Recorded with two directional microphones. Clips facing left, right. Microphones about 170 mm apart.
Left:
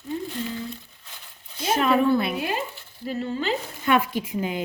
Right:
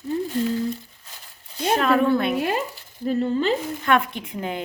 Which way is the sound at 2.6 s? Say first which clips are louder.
Right 6 dB; 40° right (ahead or behind).